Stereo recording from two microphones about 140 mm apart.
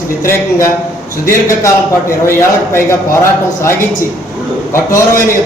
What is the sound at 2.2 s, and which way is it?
Speech, 20° left (ahead or behind).